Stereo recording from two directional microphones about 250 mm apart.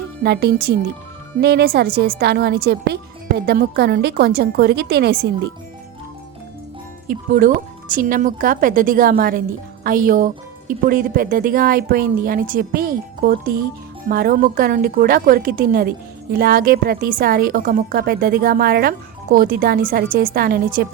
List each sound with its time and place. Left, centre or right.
0.2 s a woman's voice: right
7.1 s a woman's voice: right